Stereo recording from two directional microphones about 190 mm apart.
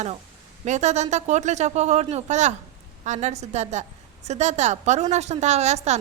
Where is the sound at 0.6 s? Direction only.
35° right (ahead or behind).